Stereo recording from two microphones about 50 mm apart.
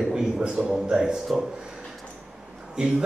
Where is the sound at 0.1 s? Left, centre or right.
Centre.